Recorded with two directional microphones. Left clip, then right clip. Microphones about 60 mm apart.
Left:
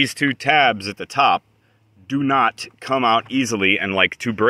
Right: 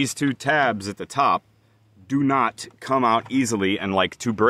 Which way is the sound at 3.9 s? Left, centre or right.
Right.